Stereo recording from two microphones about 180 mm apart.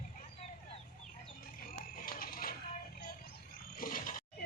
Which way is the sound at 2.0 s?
50° left (ahead or behind).